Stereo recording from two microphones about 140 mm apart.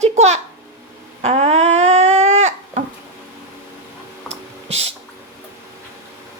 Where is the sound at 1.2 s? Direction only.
50° right (ahead or behind).